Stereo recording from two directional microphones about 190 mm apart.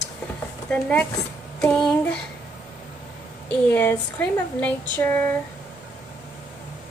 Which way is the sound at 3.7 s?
10° left (ahead or behind).